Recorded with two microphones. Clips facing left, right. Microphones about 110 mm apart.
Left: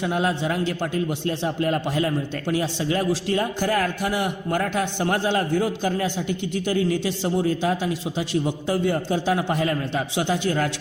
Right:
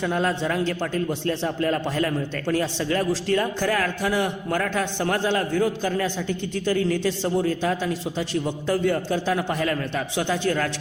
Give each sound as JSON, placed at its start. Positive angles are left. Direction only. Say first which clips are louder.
{"t": 0.0, "sound": "a man's voice", "louder": "even", "side_deg": 20}